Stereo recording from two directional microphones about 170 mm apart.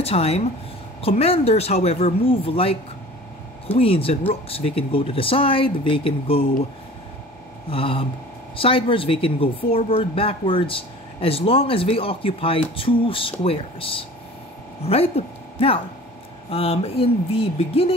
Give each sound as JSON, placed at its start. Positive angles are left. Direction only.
{"t": 0.0, "sound": "speech", "side_deg": 35}
{"t": 7.7, "sound": "speech", "side_deg": 30}